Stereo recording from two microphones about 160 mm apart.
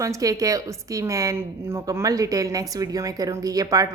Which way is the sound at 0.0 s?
20° right (ahead or behind).